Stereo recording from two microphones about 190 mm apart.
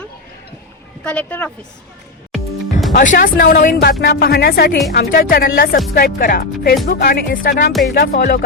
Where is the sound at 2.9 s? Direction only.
40° left (ahead or behind).